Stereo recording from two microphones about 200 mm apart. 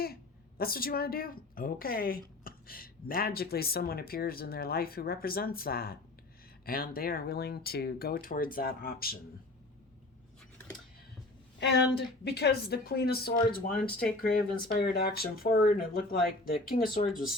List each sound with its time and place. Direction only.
0.0 s a woman's voice: 50° left (ahead or behind)
11.6 s a woman's voice: 60° left (ahead or behind)